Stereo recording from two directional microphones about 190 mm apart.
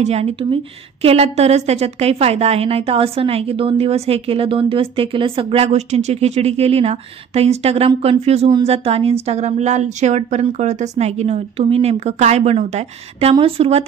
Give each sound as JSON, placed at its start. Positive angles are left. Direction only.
{"t": 0.0, "sound": "a woman's voice", "side_deg": -30}